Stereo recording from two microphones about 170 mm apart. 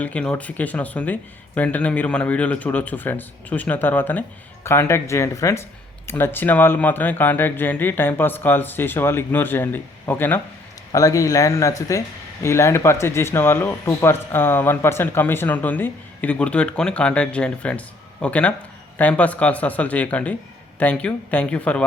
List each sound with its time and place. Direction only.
0.0 s speech: 5° left (ahead or behind)